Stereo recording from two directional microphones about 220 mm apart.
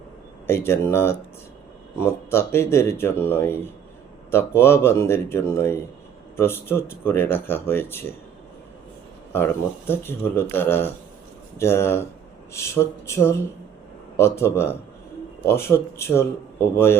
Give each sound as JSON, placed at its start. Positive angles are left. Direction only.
{"t": 0.4, "sound": "speech", "side_deg": 10}
{"t": 2.3, "sound": "speech", "side_deg": 10}
{"t": 9.3, "sound": "speech", "side_deg": 10}